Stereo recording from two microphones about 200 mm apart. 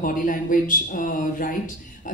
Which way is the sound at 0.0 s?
45° left (ahead or behind).